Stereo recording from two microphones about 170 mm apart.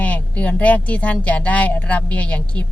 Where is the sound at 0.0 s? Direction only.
10° left (ahead or behind).